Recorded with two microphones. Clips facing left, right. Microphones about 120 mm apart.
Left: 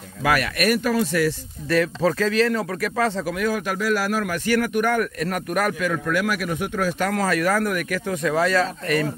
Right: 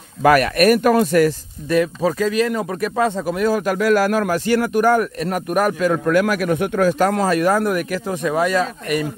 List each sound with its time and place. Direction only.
0.2 s speech: 45° right (ahead or behind)
1.7 s speech: 15° right (ahead or behind)
3.3 s speech: 35° right (ahead or behind)
3.7 s speech: 50° right (ahead or behind)
4.3 s speech: 30° right (ahead or behind)
6.0 s speech: 45° right (ahead or behind)
7.1 s speech: 25° right (ahead or behind)